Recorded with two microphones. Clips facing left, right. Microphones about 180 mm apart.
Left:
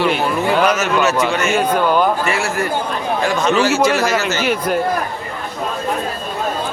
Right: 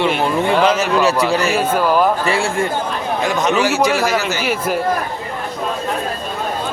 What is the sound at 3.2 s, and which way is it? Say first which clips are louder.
Speech: left 1 dB; 15° right (ahead or behind).